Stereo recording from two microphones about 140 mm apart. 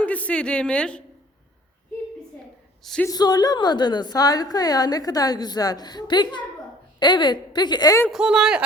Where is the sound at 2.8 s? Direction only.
5° left (ahead or behind).